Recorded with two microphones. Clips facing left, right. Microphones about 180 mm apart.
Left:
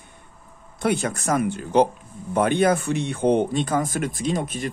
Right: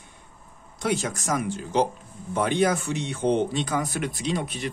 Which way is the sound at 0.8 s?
55° left (ahead or behind).